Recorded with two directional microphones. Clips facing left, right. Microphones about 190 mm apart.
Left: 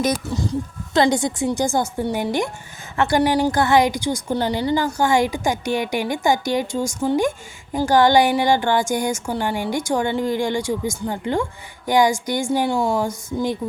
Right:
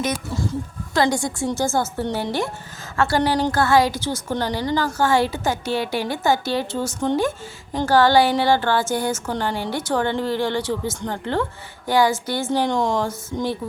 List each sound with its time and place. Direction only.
0.9 s a woman's voice: 20° left (ahead or behind)